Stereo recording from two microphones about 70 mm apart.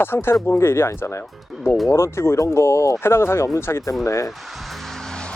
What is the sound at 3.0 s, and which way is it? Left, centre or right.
Speech, left.